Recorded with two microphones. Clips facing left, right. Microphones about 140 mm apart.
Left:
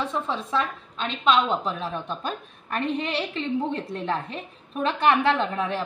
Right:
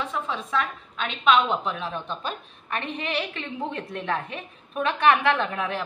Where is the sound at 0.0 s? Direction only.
30° left (ahead or behind).